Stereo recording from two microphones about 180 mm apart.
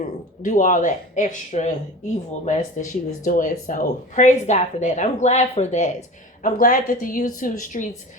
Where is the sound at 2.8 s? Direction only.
45° left (ahead or behind).